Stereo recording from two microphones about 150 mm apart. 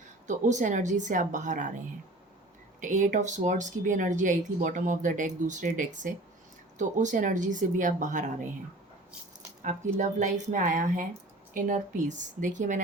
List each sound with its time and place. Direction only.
0.3 s speech: 55° right (ahead or behind)
2.8 s speech: 55° right (ahead or behind)
9.6 s speech: 55° right (ahead or behind)